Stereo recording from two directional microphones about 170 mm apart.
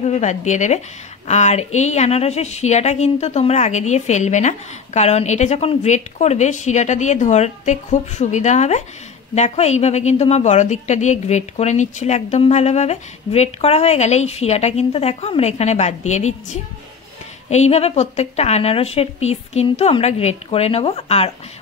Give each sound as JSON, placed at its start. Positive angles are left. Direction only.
{"t": 0.0, "sound": "a woman's voice", "side_deg": 40}